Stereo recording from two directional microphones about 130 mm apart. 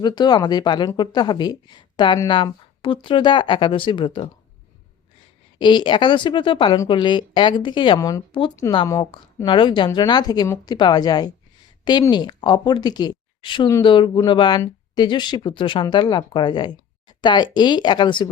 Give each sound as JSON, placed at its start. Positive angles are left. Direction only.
{"t": 0.0, "sound": "speech", "side_deg": 35}
{"t": 5.5, "sound": "speech", "side_deg": 35}
{"t": 8.3, "sound": "speech", "side_deg": 40}